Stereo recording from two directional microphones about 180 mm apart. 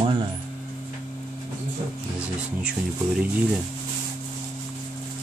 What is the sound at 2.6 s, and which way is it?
Speech, 5° right (ahead or behind).